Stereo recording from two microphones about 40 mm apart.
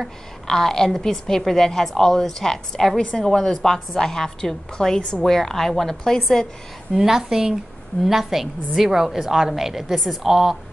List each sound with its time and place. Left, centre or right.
0.5 s a woman's voice: centre
3.0 s a woman's voice: left
3.3 s a woman's voice: centre
6.9 s a woman's voice: centre